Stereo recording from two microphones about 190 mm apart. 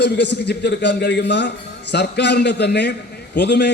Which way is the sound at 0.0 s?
65° left (ahead or behind).